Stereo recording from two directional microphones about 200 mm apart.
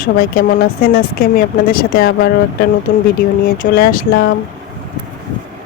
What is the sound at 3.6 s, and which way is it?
Speech, 45° left (ahead or behind).